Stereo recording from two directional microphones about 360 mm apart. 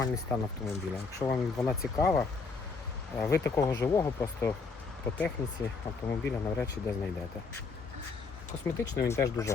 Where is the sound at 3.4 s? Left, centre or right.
Centre.